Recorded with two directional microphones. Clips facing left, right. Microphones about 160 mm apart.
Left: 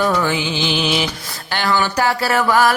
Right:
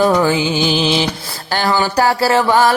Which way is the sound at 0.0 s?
35° right (ahead or behind).